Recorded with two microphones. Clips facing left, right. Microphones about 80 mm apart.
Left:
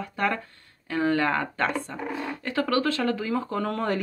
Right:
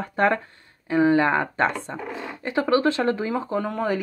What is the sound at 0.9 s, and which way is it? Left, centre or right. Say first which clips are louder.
Speech: right 5 dB; centre.